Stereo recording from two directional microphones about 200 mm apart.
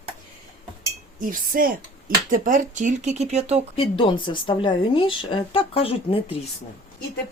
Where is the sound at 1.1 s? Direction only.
45° right (ahead or behind).